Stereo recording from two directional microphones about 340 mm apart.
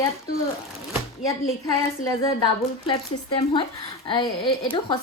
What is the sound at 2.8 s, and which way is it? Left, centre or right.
Speech, centre.